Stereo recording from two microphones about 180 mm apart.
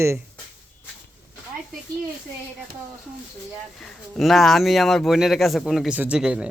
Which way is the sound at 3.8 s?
Centre (ahead or behind).